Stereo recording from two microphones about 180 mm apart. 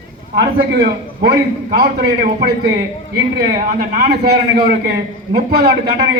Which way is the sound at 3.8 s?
60° right (ahead or behind).